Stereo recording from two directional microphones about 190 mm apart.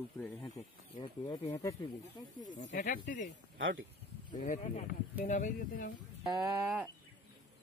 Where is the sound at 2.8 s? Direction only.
50° left (ahead or behind).